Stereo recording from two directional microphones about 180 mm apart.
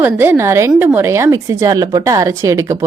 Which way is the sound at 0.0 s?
10° right (ahead or behind).